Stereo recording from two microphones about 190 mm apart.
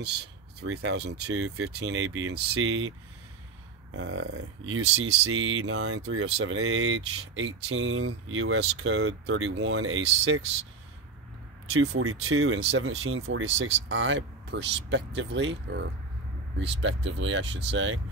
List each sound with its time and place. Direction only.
0.6 s speech: 75° right (ahead or behind)
4.6 s speech: 90° right
11.7 s speech: 90° right